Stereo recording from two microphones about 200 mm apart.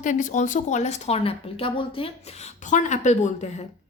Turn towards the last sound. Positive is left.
turn(degrees=35)  # may be behind; listen again after turning